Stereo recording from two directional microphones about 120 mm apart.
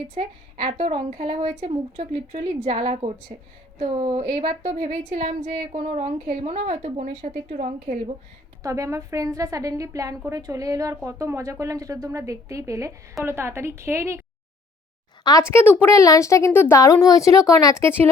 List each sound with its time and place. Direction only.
0.1 s a woman's voice: 55° right (ahead or behind); by 7.9 s 80° right
8.6 s a woman's voice: 25° right (ahead or behind)
15.2 s speech: 35° left (ahead or behind)
15.5 s a woman's voice: 20° left (ahead or behind)